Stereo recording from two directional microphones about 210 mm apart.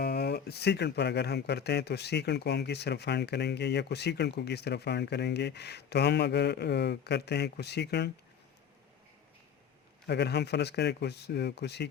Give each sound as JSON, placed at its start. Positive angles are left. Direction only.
{"t": 0.0, "sound": "speech", "side_deg": 50}
{"t": 10.1, "sound": "speech", "side_deg": 55}